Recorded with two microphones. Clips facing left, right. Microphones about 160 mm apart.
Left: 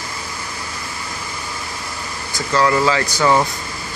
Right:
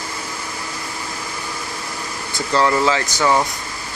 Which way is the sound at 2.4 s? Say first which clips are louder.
Left 1 dB; 25° right (ahead or behind).